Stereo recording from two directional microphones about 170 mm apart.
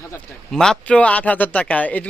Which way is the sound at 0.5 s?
5° left (ahead or behind).